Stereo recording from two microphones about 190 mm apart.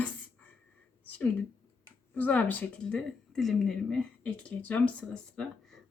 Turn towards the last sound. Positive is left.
turn(degrees=5)  # may be behind; listen again after turning